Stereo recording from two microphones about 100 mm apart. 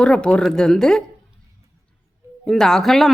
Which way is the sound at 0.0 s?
10° left (ahead or behind).